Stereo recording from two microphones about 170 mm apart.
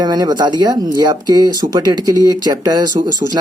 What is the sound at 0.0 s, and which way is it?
Speech, 25° right (ahead or behind).